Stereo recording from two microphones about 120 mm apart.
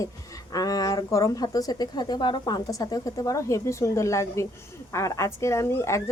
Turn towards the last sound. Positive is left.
turn(degrees=25)  # may be behind; listen again after turning